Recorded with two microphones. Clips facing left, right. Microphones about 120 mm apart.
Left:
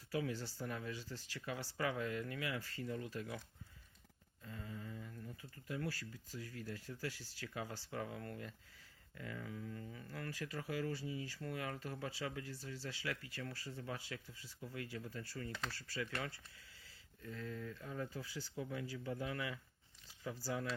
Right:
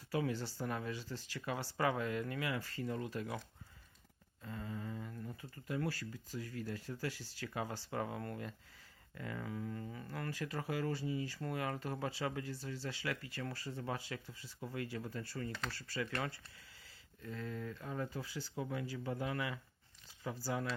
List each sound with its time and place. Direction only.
0.1 s speech: 60° right (ahead or behind)
2.2 s speech: 50° right (ahead or behind); by 3.4 s 70° right (ahead or behind)
4.4 s a sound: 65° right (ahead or behind)
5.2 s a sound: 50° right (ahead or behind)
5.6 s speech: 75° right (ahead or behind)
13.5 s speech: 55° right (ahead or behind)
17.2 s speech: 70° right (ahead or behind)